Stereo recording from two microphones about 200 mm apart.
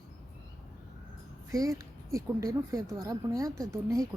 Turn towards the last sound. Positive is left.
turn(degrees=-15)  # may be behind; listen again after turning